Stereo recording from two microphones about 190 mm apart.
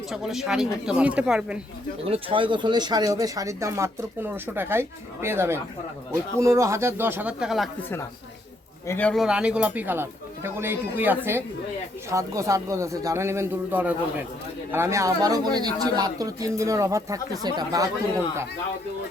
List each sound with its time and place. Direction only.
0.1 s speech: centre (ahead or behind)
2.0 s speech: 30° right (ahead or behind); by 7.7 s centre (ahead or behind)
8.9 s speech: 5° left (ahead or behind); by 17.9 s 20° right (ahead or behind)